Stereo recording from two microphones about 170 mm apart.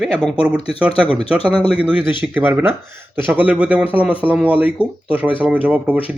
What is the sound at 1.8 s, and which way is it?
Speech, 10° right (ahead or behind).